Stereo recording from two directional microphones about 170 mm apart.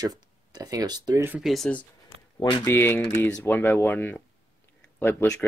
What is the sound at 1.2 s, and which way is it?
Speech, 10° right (ahead or behind).